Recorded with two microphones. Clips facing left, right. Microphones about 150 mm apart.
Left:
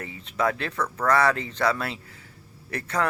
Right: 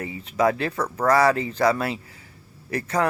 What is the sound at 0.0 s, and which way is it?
Speech, 10° right (ahead or behind).